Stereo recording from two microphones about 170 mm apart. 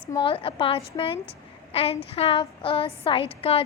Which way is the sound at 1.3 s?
35° left (ahead or behind).